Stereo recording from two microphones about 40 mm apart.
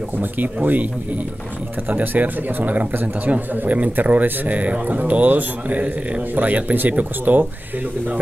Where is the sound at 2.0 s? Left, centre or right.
Right.